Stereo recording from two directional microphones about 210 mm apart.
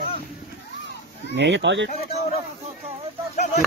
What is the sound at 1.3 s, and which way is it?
Speech, 60° right (ahead or behind).